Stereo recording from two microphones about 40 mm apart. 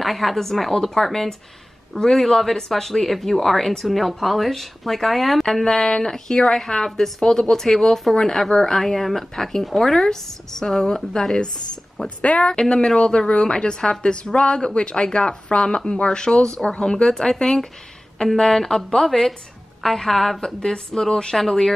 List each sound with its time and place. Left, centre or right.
0.0 s a woman's voice: centre
20.3 s speech: centre
21.4 s speech: centre